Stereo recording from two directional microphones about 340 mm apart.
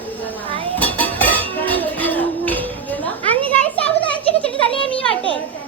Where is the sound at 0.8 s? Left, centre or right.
Centre.